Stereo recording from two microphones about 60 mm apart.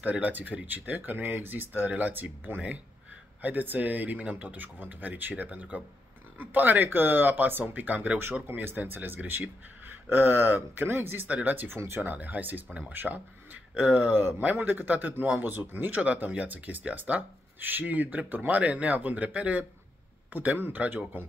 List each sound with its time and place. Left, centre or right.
0.0 s speech: right
8.5 s speech: right
11.2 s speech: right
12.0 s speech: right
16.0 s speech: right